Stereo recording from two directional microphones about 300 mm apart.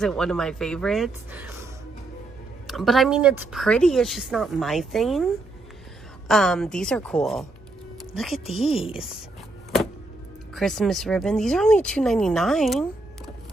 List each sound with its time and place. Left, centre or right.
0.0 s speech: centre
8.7 s speech: centre
10.5 s speech: centre